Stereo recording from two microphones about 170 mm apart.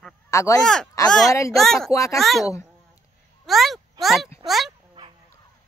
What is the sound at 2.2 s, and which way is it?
Speech, centre (ahead or behind).